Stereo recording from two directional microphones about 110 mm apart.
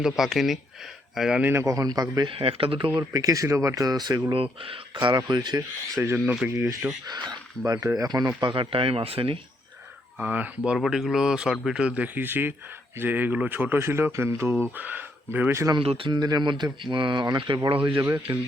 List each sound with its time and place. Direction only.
0.0 s speech: centre (ahead or behind)
1.4 s a man's voice: 20° right (ahead or behind)
1.6 s speech: 35° right (ahead or behind)
2.3 s speech: 60° right (ahead or behind)
3.1 s speech: 35° right (ahead or behind)
4.6 s speech: 50° right (ahead or behind)
6.0 s a man's voice: 20° right (ahead or behind)
7.1 s speech: 35° right (ahead or behind)
8.4 s speech: 45° right (ahead or behind)
10.2 s a man's voice: 15° right (ahead or behind)
15.8 s speech: 55° right (ahead or behind)
16.1 s speech: 40° right (ahead or behind)
18.0 s speech: 30° right (ahead or behind)